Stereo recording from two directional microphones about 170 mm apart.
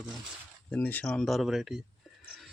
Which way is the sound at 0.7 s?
10° left (ahead or behind).